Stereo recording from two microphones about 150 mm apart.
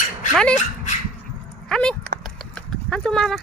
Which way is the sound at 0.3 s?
5° left (ahead or behind).